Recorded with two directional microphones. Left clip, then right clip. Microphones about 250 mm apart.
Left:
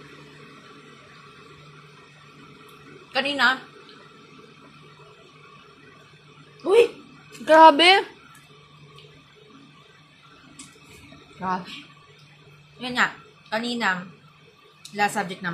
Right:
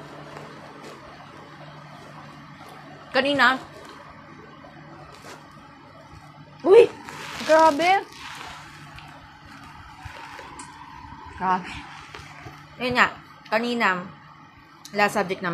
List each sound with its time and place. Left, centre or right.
3.1 s a woman's voice: left
7.4 s speech: left
11.4 s speech: left
12.8 s a woman's voice: left
15.0 s a woman's voice: left